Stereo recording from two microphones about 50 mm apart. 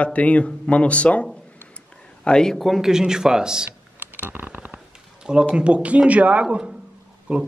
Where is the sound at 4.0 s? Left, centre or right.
Right.